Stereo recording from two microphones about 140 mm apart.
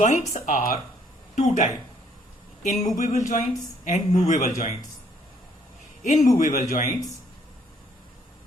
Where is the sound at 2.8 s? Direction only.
60° left (ahead or behind).